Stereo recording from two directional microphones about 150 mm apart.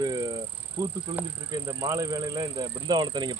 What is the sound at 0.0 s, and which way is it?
Vehicle, 25° right (ahead or behind).